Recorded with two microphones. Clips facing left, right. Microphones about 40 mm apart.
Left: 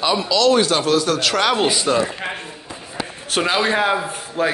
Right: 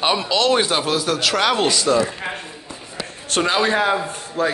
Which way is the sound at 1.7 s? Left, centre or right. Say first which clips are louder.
Right 1 dB; centre.